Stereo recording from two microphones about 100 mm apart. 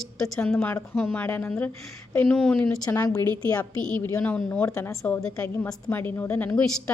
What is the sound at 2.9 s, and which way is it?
A woman's voice, 35° left (ahead or behind).